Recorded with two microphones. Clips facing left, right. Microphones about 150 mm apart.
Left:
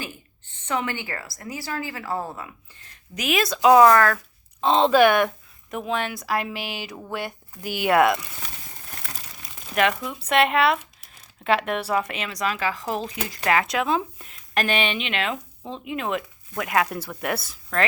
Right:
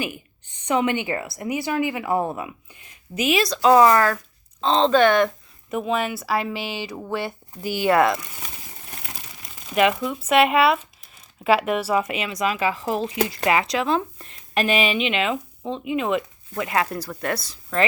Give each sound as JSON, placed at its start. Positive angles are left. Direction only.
{"t": 0.0, "sound": "a woman's voice", "side_deg": -15}
{"t": 3.2, "sound": "speech", "side_deg": 0}
{"t": 4.6, "sound": "speech", "side_deg": 5}
{"t": 5.7, "sound": "speech", "side_deg": -5}
{"t": 7.6, "sound": "speech", "side_deg": 55}
{"t": 7.9, "sound": "speech", "side_deg": 5}
{"t": 9.7, "sound": "speech", "side_deg": -5}